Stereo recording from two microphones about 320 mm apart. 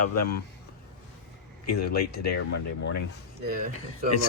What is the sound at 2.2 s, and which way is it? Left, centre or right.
Speech, left.